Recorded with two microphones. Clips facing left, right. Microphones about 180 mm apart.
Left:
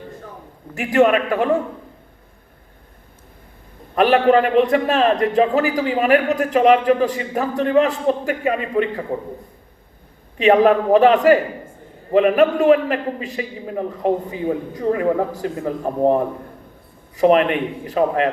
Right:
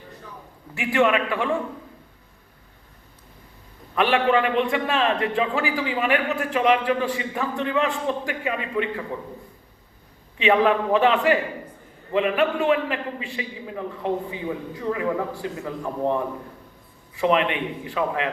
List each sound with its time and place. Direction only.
0.7 s a man's voice: 40° left (ahead or behind)
3.9 s a man's voice: 40° left (ahead or behind)
10.3 s a man's voice: 40° left (ahead or behind)